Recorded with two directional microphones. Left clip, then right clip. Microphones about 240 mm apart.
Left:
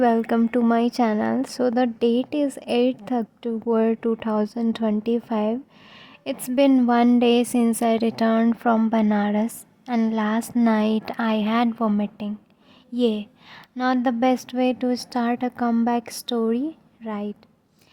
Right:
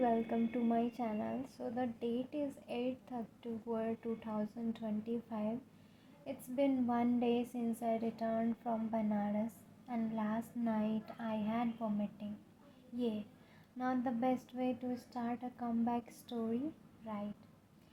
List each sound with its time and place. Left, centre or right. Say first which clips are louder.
0.0 s a woman's voice: left 15 dB; left